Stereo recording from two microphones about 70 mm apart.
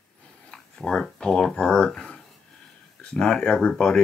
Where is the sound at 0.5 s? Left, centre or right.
Centre.